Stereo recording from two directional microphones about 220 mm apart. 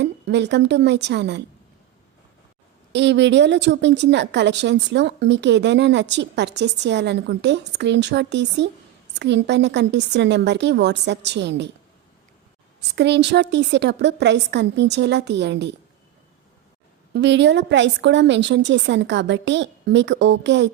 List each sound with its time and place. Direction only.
0.0 s a woman's voice: 50° right (ahead or behind)
2.9 s a woman's voice: 55° right (ahead or behind)
13.0 s a woman's voice: 50° right (ahead or behind)
17.2 s a woman's voice: 55° right (ahead or behind)